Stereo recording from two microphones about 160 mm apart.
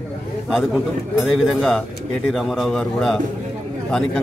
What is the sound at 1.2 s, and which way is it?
A man's voice, centre (ahead or behind).